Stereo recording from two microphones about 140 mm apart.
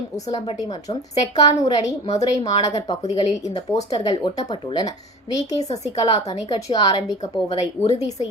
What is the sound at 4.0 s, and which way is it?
Speech, 30° left (ahead or behind).